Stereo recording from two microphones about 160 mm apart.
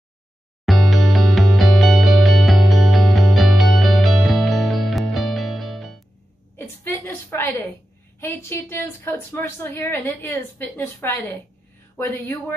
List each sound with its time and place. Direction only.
0.7 s music: centre (ahead or behind)
6.5 s a sound: 15° left (ahead or behind)
8.2 s a woman's voice: 15° left (ahead or behind)